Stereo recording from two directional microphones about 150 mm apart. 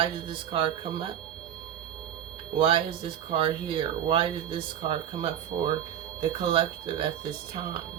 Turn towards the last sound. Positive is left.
turn(degrees=-35)  # may be behind; listen again after turning